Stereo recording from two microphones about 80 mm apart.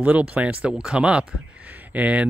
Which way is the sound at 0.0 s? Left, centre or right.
Centre.